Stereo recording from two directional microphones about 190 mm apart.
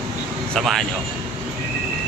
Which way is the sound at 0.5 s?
Centre (ahead or behind).